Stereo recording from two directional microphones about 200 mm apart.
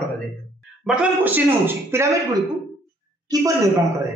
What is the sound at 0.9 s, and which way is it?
A man's voice, 5° right (ahead or behind).